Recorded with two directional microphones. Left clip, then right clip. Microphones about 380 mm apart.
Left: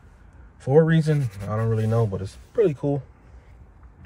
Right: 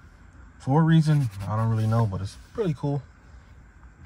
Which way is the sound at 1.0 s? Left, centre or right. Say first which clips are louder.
Left 2 dB; centre.